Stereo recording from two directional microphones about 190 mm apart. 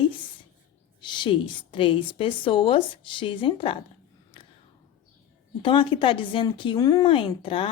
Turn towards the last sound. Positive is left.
turn(degrees=30)  # may be behind; listen again after turning